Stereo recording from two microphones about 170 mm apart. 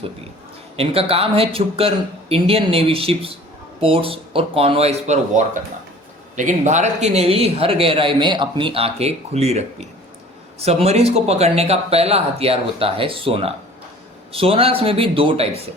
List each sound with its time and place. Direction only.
0.8 s a man's voice: 35° right (ahead or behind)